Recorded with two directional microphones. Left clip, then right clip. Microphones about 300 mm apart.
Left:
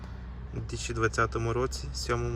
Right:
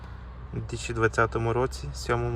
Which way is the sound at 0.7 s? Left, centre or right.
Centre.